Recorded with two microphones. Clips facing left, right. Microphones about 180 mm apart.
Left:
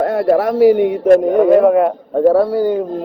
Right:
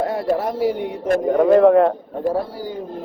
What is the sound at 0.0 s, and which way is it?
Speech, 65° left (ahead or behind).